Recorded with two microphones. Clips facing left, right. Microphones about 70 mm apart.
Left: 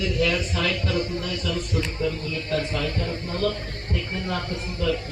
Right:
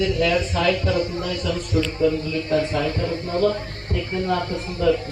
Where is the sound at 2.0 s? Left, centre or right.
Centre.